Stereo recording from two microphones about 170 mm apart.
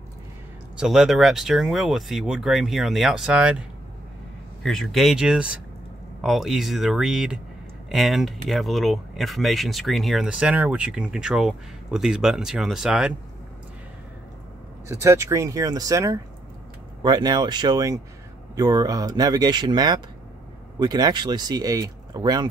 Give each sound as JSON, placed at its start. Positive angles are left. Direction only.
{"t": 0.7, "sound": "speech", "side_deg": 0}
{"t": 4.6, "sound": "speech", "side_deg": 0}
{"t": 14.9, "sound": "speech", "side_deg": -15}